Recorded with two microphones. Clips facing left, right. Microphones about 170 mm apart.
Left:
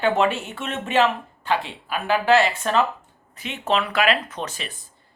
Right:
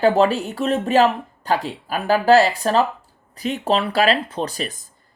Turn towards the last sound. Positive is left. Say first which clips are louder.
# right 6 dB
turn(degrees=-40)  # may be behind; listen again after turning